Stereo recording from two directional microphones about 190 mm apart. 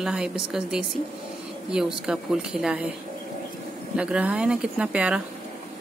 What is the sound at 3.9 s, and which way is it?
Speech, 5° right (ahead or behind).